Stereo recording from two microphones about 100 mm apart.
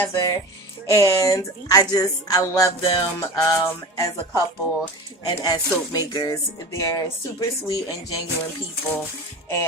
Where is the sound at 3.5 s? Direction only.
20° left (ahead or behind).